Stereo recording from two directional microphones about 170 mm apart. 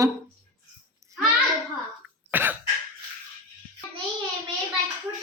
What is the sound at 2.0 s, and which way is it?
Throat clearing, 10° right (ahead or behind).